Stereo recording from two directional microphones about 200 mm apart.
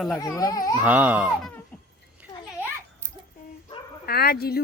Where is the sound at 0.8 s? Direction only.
5° right (ahead or behind).